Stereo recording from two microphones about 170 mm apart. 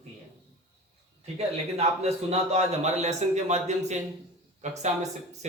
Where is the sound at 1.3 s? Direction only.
40° right (ahead or behind).